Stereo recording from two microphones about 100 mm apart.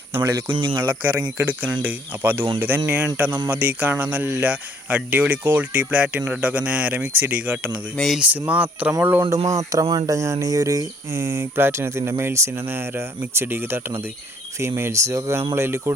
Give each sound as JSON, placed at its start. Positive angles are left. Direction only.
{"t": 0.1, "sound": "speech", "side_deg": -20}
{"t": 0.5, "sound": "speech", "side_deg": -55}
{"t": 1.4, "sound": "speech", "side_deg": -15}
{"t": 7.9, "sound": "speech", "side_deg": 0}
{"t": 8.2, "sound": "speech", "side_deg": -15}
{"t": 9.5, "sound": "speech", "side_deg": -35}